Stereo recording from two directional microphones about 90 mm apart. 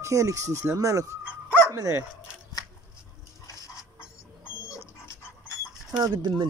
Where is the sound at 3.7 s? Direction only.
35° left (ahead or behind).